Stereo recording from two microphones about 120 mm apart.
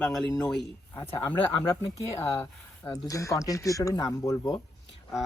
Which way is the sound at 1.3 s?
15° left (ahead or behind).